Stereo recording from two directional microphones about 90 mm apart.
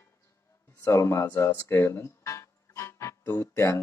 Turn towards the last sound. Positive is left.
turn(degrees=30)  # may be behind; listen again after turning